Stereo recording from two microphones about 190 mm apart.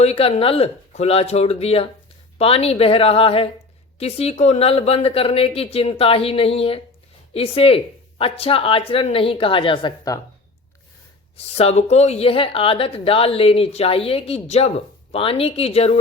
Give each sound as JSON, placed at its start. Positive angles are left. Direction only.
{"t": 0.0, "sound": "a woman's voice", "side_deg": 30}
{"t": 11.5, "sound": "a woman's voice", "side_deg": 35}